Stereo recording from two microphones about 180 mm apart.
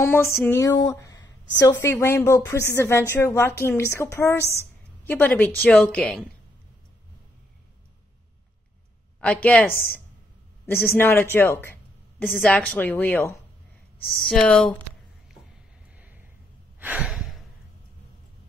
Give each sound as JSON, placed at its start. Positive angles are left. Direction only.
{"t": 0.0, "sound": "a woman's voice", "side_deg": 15}
{"t": 9.2, "sound": "a woman's voice", "side_deg": 5}
{"t": 14.1, "sound": "speech", "side_deg": 0}
{"t": 16.0, "sound": "a sound", "side_deg": -10}